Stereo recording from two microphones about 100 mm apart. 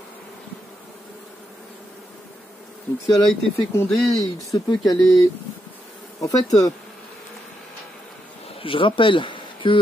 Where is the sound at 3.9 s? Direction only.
35° left (ahead or behind).